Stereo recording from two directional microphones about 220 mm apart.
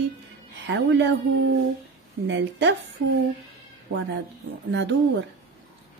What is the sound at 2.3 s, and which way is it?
Speech, 50° right (ahead or behind).